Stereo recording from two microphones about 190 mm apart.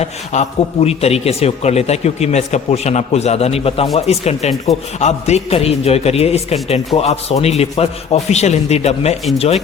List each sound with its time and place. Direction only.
0.0 s a man's voice: 35° left (ahead or behind)